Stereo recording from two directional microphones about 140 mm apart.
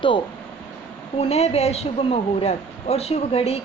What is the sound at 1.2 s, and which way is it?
A woman's voice, 45° left (ahead or behind).